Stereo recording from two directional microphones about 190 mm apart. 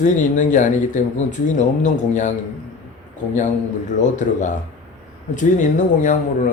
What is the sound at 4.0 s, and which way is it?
Speech, 40° left (ahead or behind).